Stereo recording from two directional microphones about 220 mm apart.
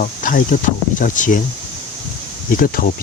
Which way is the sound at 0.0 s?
40° left (ahead or behind).